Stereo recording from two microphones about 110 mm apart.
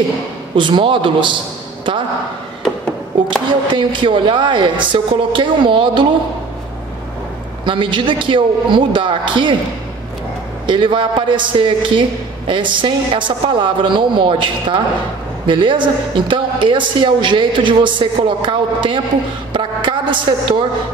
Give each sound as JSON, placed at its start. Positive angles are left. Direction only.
{"t": 0.6, "sound": "a woman's voice", "side_deg": -45}
{"t": 3.7, "sound": "a woman's voice", "side_deg": -45}
{"t": 7.6, "sound": "a woman's voice", "side_deg": -50}
{"t": 10.7, "sound": "a woman's voice", "side_deg": -45}
{"t": 19.5, "sound": "a sound", "side_deg": -45}